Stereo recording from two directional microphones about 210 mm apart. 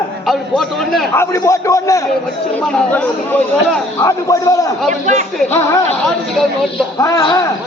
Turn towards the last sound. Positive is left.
turn(degrees=15)  # may be behind; listen again after turning